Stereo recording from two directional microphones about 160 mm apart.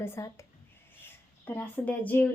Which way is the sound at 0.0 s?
15° left (ahead or behind).